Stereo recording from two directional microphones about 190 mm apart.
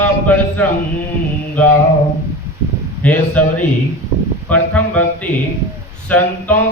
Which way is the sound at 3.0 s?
10° left (ahead or behind).